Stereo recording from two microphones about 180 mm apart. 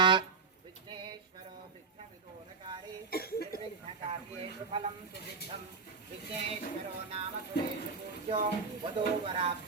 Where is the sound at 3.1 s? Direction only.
60° left (ahead or behind).